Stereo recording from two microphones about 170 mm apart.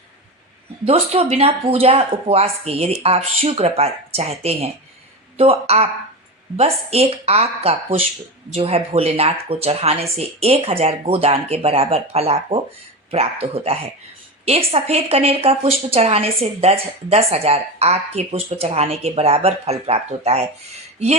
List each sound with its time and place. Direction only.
0.9 s a woman's voice: 35° right (ahead or behind)